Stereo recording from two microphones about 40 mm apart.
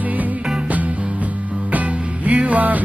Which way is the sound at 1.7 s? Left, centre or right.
Right.